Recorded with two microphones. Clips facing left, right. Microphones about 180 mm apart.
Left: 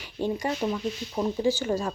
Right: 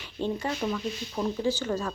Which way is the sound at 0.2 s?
15° left (ahead or behind).